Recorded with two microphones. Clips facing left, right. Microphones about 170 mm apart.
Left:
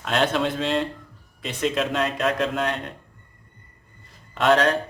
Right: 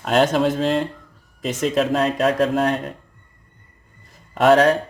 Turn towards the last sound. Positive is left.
turn(degrees=-40)  # may be behind; listen again after turning